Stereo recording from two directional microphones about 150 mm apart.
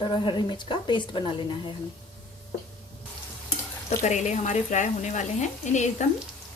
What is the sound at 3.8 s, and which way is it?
Speech, 50° left (ahead or behind).